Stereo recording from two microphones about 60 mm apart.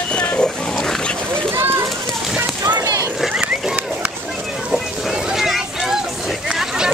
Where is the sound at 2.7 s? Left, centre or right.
Right.